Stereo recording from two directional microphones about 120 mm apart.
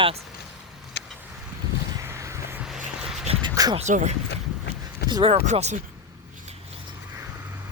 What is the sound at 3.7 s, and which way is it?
Speech, 80° right.